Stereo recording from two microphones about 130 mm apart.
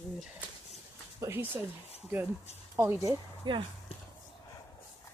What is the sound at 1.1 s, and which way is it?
Speech, 20° right (ahead or behind).